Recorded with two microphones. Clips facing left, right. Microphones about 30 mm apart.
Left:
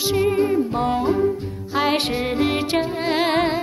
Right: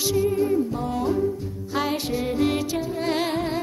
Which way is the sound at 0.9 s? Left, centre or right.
Left.